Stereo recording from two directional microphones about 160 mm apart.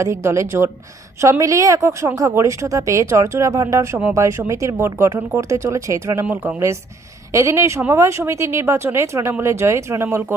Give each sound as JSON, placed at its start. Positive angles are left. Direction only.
{"t": 0.0, "sound": "a woman's voice", "side_deg": -20}